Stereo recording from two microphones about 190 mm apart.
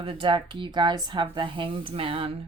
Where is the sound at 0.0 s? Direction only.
30° right (ahead or behind).